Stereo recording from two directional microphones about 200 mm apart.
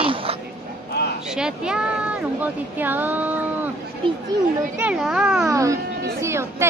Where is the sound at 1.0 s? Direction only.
55° left (ahead or behind).